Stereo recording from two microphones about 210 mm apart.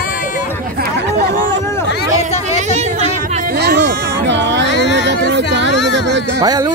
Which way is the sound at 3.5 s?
50° right (ahead or behind).